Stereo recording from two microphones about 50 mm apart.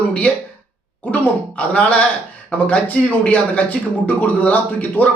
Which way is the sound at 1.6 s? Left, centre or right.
Left.